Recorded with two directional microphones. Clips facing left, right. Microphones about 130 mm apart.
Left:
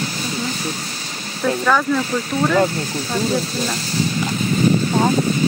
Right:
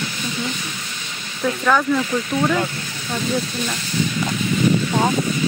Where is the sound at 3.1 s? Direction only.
35° left (ahead or behind).